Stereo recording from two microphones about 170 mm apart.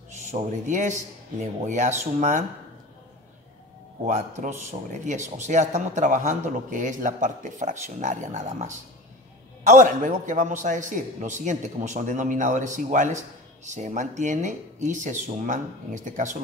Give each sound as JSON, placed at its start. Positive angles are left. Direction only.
{"t": 0.3, "sound": "speech", "side_deg": -45}
{"t": 4.0, "sound": "speech", "side_deg": -45}